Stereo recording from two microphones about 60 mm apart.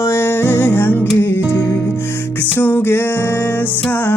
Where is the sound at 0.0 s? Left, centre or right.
Left.